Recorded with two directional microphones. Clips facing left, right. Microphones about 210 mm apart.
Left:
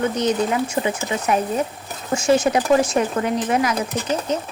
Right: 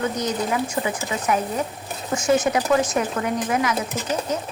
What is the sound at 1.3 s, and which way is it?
A woman's voice, 25° left (ahead or behind).